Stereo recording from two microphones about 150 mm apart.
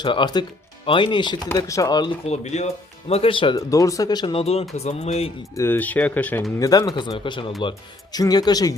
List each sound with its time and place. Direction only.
0.0 s speech: 30° left (ahead or behind)
1.5 s speech: 20° left (ahead or behind)
2.2 s speech: 45° left (ahead or behind)
3.7 s speech: 20° left (ahead or behind); by 5.3 s 45° left (ahead or behind)
5.5 s speech: 15° left (ahead or behind)
6.6 s speech: 25° left (ahead or behind)